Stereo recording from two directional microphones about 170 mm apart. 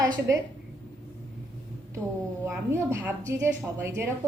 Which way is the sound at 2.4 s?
15° right (ahead or behind).